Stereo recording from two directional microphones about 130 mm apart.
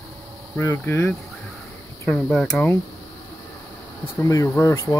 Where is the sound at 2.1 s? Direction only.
5° left (ahead or behind).